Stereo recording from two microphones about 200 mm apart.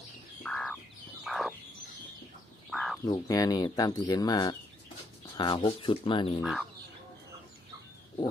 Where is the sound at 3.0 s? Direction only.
15° left (ahead or behind).